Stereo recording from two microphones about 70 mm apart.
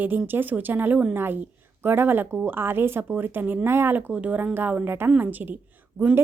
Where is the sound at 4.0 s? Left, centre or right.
Right.